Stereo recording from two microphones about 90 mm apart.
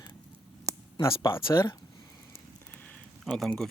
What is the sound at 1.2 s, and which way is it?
Speech, 30° left (ahead or behind).